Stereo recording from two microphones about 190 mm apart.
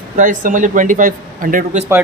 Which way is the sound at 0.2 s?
45° right (ahead or behind).